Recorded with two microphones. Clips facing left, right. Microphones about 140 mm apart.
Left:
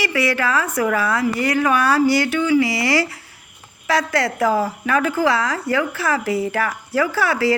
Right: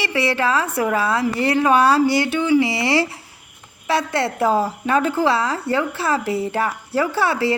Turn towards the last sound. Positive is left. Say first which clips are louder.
# left 1 dB
turn(degrees=-25)  # may be behind; listen again after turning